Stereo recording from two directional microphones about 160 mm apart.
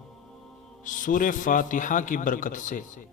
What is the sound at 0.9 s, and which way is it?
A man's voice, 55° left (ahead or behind).